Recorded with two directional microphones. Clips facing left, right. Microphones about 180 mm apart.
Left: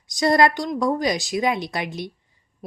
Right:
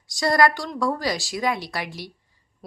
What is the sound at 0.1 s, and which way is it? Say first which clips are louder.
A woman's voice: left 2 dB; 20° left (ahead or behind).